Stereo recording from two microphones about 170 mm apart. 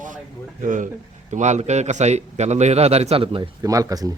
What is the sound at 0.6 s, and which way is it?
A man's voice, 50° right (ahead or behind).